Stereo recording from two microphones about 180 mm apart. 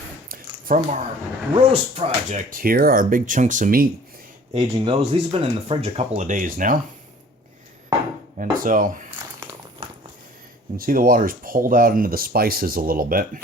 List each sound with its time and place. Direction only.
0.3 s a sound: 50° right (ahead or behind)
1.7 s speech: 35° right (ahead or behind)
2.5 s speech: 55° right (ahead or behind)
4.5 s speech: 30° right (ahead or behind); by 6.7 s 50° right (ahead or behind)
8.4 s speech: 50° right (ahead or behind)
10.8 s speech: 50° right (ahead or behind)